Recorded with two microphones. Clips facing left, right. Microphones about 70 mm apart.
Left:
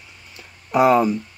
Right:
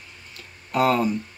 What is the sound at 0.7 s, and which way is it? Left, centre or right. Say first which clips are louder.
Speech: left 5 dB; centre.